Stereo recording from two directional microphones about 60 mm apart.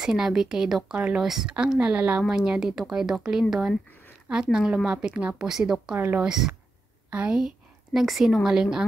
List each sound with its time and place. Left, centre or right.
0.0 s speech: centre
1.2 s speech: centre
1.8 s speech: right
5.9 s speech: right
7.1 s a woman's voice: right
7.3 s a woman's voice: centre